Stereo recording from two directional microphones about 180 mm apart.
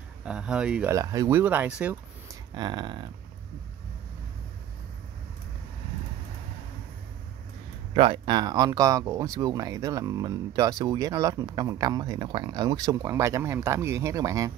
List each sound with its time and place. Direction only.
0.2 s speech: 5° right (ahead or behind)
0.9 s speech: 20° right (ahead or behind)
2.5 s speech: 25° right (ahead or behind)
7.9 s speech: 30° right (ahead or behind)